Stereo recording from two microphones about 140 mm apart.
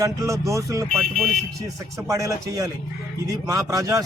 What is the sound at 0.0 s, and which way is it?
Speech, 25° right (ahead or behind).